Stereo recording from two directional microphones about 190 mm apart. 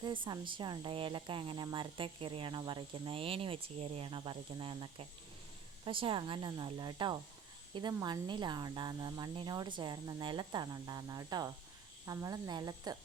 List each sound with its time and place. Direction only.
0.0 s speech: 25° right (ahead or behind)